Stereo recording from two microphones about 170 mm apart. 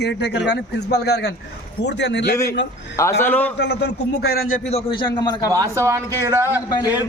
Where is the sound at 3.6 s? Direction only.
85° left; by 4.7 s 65° left (ahead or behind).